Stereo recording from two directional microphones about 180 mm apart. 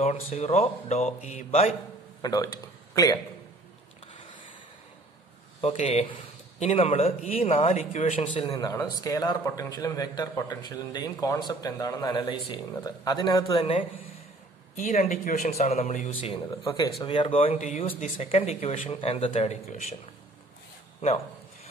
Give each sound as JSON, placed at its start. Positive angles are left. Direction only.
{"t": 0.0, "sound": "speech", "side_deg": 35}
{"t": 2.2, "sound": "speech", "side_deg": 20}
{"t": 5.6, "sound": "speech", "side_deg": 35}
{"t": 8.5, "sound": "a man's voice", "side_deg": 20}
{"t": 17.6, "sound": "speech", "side_deg": 45}